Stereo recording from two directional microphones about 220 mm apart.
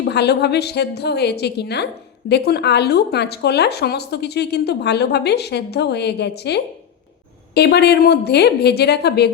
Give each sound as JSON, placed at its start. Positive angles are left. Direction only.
{"t": 0.0, "sound": "speech", "side_deg": 50}